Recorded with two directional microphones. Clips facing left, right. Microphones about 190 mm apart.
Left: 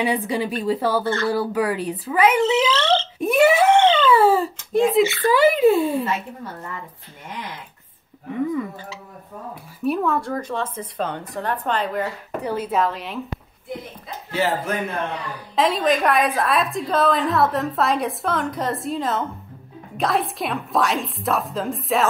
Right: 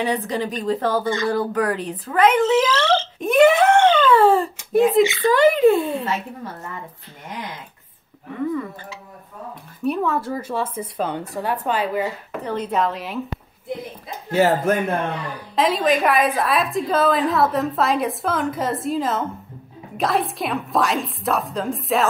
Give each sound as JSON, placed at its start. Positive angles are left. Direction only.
{"t": 0.0, "sound": "a woman's voice", "side_deg": 10}
{"t": 1.0, "sound": "speech", "side_deg": -15}
{"t": 1.3, "sound": "a woman's voice", "side_deg": 5}
{"t": 2.6, "sound": "speech", "side_deg": -10}
{"t": 3.2, "sound": "speech", "side_deg": 10}
{"t": 3.8, "sound": "a sound", "side_deg": -10}
{"t": 4.1, "sound": "a sound", "side_deg": 5}
{"t": 5.0, "sound": "speech", "side_deg": -15}
{"t": 5.3, "sound": "a woman's voice", "side_deg": 5}
{"t": 9.8, "sound": "speech", "side_deg": 0}
{"t": 12.4, "sound": "a woman's voice", "side_deg": 5}
{"t": 14.3, "sound": "speech", "side_deg": -45}
{"t": 15.5, "sound": "a woman's voice", "side_deg": 0}